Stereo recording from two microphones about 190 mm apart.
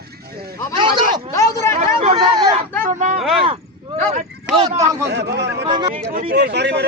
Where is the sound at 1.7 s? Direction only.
35° right (ahead or behind).